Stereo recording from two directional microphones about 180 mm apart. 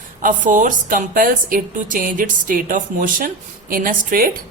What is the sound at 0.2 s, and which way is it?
A woman's voice, 45° right (ahead or behind).